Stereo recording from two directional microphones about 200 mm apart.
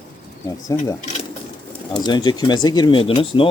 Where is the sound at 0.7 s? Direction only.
15° left (ahead or behind).